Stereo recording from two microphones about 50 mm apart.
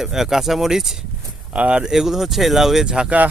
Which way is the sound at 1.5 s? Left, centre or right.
Right.